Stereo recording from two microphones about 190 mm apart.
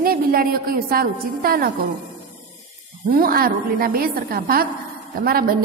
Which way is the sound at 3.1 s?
50° right (ahead or behind).